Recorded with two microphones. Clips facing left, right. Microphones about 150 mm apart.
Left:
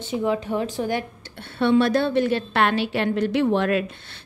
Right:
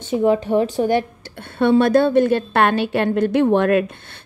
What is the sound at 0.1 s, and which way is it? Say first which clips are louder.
A woman's voice: right 7 dB; 35° right (ahead or behind).